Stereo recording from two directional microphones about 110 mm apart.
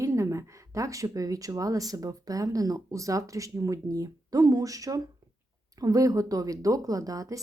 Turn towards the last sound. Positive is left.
turn(degrees=-30)  # may be behind; listen again after turning